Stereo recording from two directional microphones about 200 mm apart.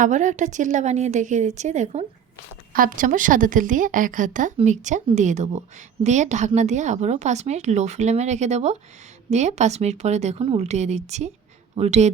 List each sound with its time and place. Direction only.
0.0 s a woman's voice: 40° right (ahead or behind)